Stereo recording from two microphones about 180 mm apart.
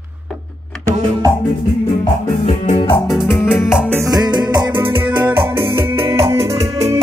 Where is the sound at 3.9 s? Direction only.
20° right (ahead or behind).